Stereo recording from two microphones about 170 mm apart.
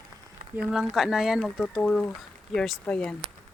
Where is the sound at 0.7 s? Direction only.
Centre (ahead or behind).